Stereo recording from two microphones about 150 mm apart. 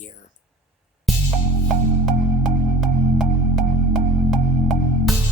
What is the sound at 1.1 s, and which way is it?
Music, centre (ahead or behind).